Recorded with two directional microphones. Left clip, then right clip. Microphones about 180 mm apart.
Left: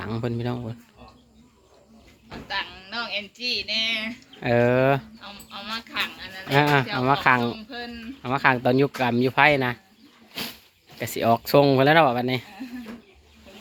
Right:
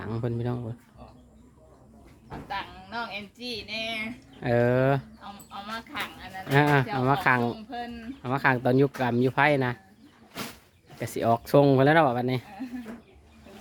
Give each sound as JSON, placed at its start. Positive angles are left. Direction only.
{"t": 0.0, "sound": "speech", "side_deg": 0}
{"t": 2.3, "sound": "speech", "side_deg": -60}
{"t": 4.4, "sound": "speech", "side_deg": 10}
{"t": 5.2, "sound": "speech", "side_deg": -65}
{"t": 6.5, "sound": "speech", "side_deg": 5}
{"t": 7.7, "sound": "speech", "side_deg": -65}
{"t": 8.2, "sound": "speech", "side_deg": 0}
{"t": 10.9, "sound": "speech", "side_deg": 0}